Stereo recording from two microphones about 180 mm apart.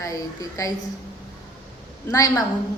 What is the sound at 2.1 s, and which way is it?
Speech, 20° left (ahead or behind).